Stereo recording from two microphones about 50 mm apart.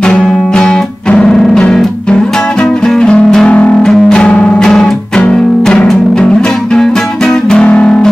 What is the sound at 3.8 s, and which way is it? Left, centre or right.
Music, centre.